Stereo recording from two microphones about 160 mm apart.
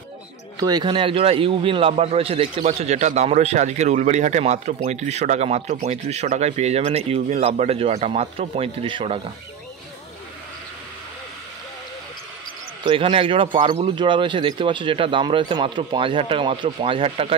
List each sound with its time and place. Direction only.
0.6 s a man's voice: 25° right (ahead or behind)
12.8 s a man's voice: 35° right (ahead or behind)